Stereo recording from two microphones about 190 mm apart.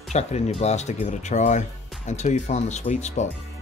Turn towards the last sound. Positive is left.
turn(degrees=35)  # may be behind; listen again after turning